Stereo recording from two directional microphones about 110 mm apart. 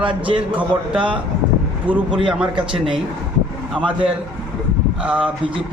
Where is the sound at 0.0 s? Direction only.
50° right (ahead or behind).